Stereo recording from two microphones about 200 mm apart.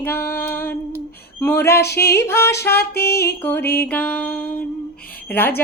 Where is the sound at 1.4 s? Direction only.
10° left (ahead or behind).